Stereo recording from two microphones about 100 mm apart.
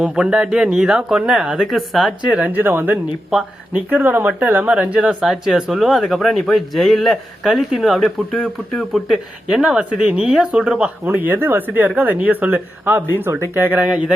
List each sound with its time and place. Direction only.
0.0 s speech: 10° right (ahead or behind)
2.3 s speech: 15° right (ahead or behind)